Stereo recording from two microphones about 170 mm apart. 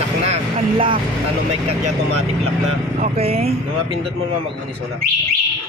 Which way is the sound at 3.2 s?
35° right (ahead or behind).